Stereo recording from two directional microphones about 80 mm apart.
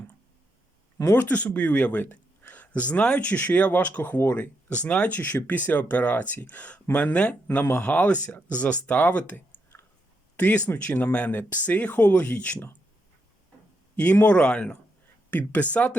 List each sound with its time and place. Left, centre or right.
1.1 s speech: left
7.4 s speech: left
13.9 s speech: centre